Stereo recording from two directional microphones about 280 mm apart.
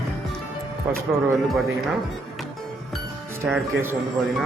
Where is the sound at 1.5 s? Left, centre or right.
Centre.